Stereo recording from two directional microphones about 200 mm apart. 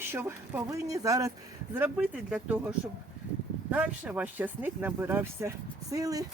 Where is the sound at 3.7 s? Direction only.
5° right (ahead or behind).